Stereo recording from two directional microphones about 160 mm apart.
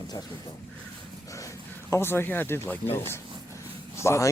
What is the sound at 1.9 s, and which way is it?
Speech, 15° left (ahead or behind).